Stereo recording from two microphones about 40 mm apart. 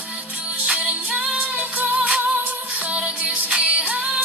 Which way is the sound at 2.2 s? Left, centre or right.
Right.